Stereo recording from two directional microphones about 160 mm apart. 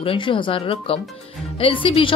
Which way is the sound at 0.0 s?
35° left (ahead or behind).